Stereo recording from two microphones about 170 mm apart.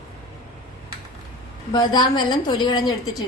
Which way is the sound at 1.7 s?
25° left (ahead or behind).